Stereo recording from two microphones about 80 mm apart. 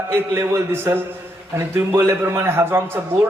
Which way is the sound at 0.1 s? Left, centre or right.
Right.